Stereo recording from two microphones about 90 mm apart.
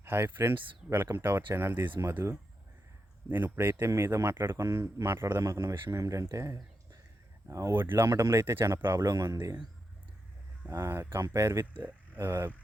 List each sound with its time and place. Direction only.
0.0 s speech: 25° right (ahead or behind)
6.3 s a sound: 35° right (ahead or behind)
7.5 s speech: 30° right (ahead or behind)
10.7 s speech: 30° right (ahead or behind)
11.8 s speech: 20° right (ahead or behind)